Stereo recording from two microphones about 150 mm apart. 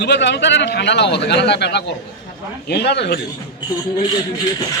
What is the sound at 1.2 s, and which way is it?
Speech, 90° left.